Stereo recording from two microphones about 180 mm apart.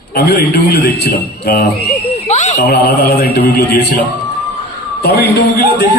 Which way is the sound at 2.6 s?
65° left (ahead or behind).